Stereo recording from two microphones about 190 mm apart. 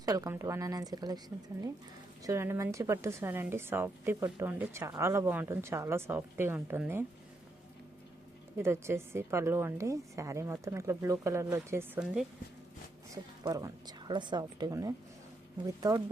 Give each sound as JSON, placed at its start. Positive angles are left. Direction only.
{"t": 0.0, "sound": "a woman's voice", "side_deg": -20}
{"t": 2.2, "sound": "a woman's voice", "side_deg": -15}
{"t": 8.5, "sound": "a woman's voice", "side_deg": -15}
{"t": 13.4, "sound": "a woman's voice", "side_deg": -20}